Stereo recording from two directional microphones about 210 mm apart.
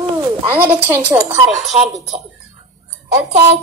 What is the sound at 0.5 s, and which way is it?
Speech, 10° right (ahead or behind).